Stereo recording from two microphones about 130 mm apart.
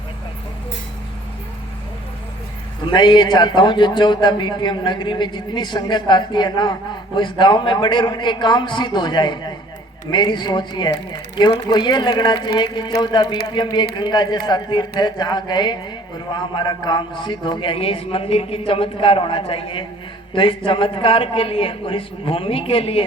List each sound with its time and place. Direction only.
2.8 s a man's voice: 35° left (ahead or behind)